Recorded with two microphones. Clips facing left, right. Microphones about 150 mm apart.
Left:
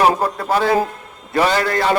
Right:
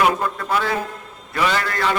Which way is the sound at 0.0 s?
35° left (ahead or behind).